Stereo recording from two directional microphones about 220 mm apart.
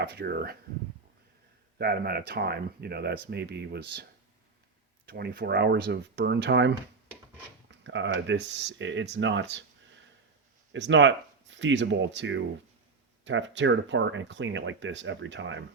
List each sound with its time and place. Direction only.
0.0 s speech: 50° right (ahead or behind)
1.8 s speech: 45° right (ahead or behind)
5.0 s speech: 45° right (ahead or behind)
10.7 s speech: 55° right (ahead or behind)